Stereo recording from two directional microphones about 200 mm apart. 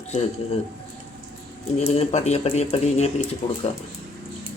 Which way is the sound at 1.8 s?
30° left (ahead or behind).